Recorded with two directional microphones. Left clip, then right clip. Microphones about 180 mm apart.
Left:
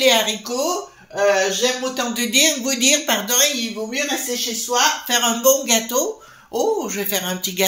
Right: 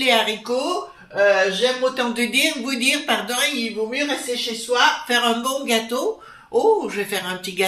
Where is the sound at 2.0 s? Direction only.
45° left (ahead or behind).